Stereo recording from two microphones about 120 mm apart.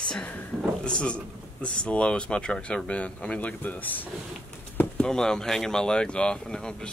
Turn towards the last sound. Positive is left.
turn(degrees=5)  # may be behind; listen again after turning